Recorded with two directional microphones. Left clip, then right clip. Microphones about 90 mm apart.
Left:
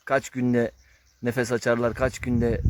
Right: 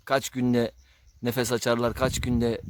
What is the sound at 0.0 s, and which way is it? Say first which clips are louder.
Speech: left 1 dB; 30° right (ahead or behind).